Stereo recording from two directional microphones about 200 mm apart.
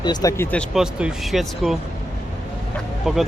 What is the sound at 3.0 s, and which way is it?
Speech, centre (ahead or behind).